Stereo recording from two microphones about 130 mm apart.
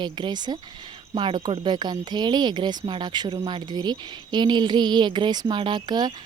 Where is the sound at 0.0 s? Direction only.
35° right (ahead or behind).